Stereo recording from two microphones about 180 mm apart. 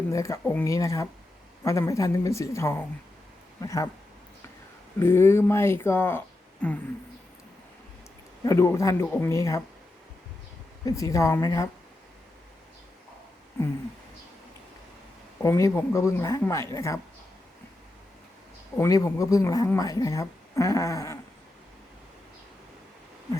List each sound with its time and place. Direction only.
0.1 s a woman's voice: 15° left (ahead or behind)
4.9 s a woman's voice: 15° left (ahead or behind)
8.4 s a woman's voice: 15° left (ahead or behind)
10.8 s a woman's voice: 20° left (ahead or behind)
15.4 s a woman's voice: 15° left (ahead or behind)
18.8 s a woman's voice: 15° left (ahead or behind)